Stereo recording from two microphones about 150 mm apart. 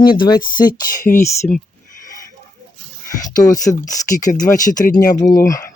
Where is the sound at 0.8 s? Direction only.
65° left (ahead or behind).